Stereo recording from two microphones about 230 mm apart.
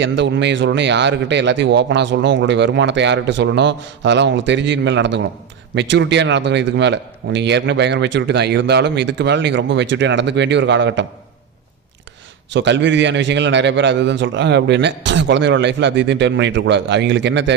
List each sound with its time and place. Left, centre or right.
0.0 s a man's voice: right
12.5 s a man's voice: right